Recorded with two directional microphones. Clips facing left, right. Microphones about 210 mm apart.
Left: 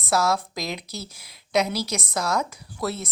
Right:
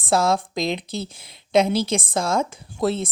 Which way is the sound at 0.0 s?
30° right (ahead or behind).